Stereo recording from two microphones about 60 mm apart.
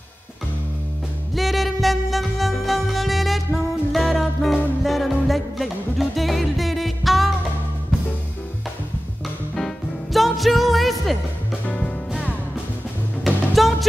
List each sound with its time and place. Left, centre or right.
1.3 s music: centre
9.6 s music: centre
11.6 s music: left
13.2 s music: centre